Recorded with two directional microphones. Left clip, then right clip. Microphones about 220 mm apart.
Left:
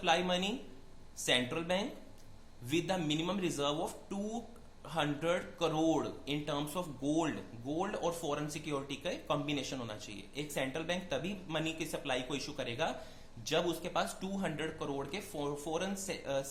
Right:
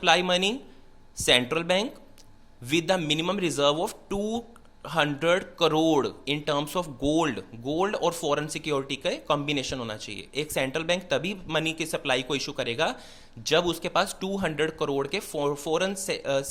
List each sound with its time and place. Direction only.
0.0 s speech: 40° right (ahead or behind)